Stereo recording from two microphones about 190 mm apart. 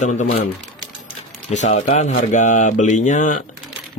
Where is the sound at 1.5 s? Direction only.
40° left (ahead or behind).